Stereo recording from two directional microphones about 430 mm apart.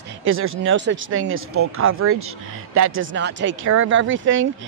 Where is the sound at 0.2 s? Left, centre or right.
Right.